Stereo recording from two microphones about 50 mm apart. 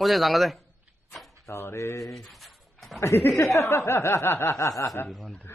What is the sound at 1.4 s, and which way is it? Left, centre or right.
Speech, left.